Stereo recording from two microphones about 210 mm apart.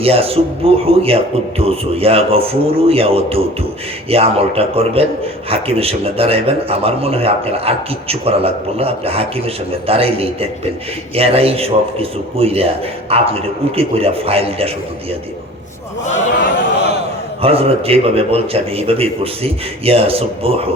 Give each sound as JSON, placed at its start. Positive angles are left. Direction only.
{"t": 0.0, "sound": "a man's voice", "side_deg": -25}
{"t": 17.4, "sound": "a man's voice", "side_deg": -25}